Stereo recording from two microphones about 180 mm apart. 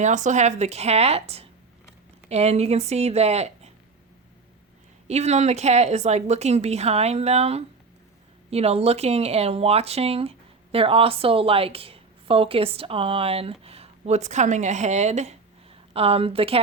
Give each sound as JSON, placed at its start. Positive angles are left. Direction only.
{"t": 0.0, "sound": "a woman's voice", "side_deg": -40}
{"t": 5.0, "sound": "a woman's voice", "side_deg": -40}